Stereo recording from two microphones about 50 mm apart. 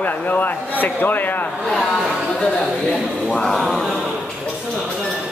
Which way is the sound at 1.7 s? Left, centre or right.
Centre.